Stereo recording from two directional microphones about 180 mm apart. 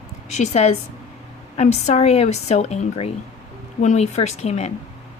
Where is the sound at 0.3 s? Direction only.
40° left (ahead or behind).